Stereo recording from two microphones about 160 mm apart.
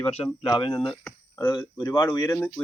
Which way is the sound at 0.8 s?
Centre (ahead or behind).